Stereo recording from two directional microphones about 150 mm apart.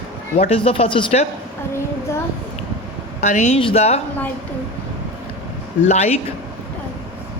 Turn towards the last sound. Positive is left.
turn(degrees=45)  # may be behind; listen again after turning